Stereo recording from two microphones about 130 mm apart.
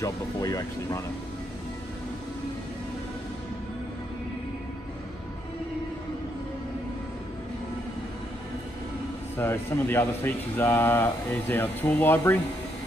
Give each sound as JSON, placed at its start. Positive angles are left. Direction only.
{"t": 0.0, "sound": "speech", "side_deg": 25}
{"t": 9.4, "sound": "speech", "side_deg": 15}